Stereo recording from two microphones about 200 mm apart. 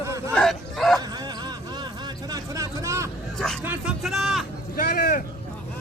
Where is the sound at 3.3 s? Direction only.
5° left (ahead or behind).